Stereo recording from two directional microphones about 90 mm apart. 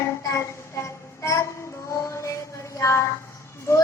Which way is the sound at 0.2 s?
35° left (ahead or behind).